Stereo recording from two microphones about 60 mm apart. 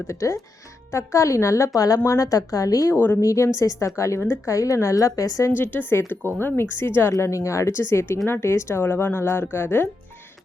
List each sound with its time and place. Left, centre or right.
0.1 s a woman's voice: left
2.9 s speech: left
3.2 s a woman's voice: left
5.5 s speech: left
7.2 s speech: left